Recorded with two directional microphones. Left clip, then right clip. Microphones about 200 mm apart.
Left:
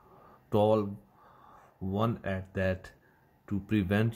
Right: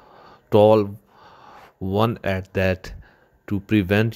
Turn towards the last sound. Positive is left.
turn(degrees=-40)  # may be behind; listen again after turning